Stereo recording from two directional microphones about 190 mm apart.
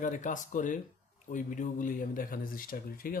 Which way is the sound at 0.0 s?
40° left (ahead or behind).